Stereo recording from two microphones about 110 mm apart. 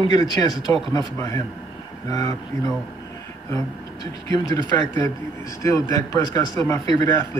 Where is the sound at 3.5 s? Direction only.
35° left (ahead or behind).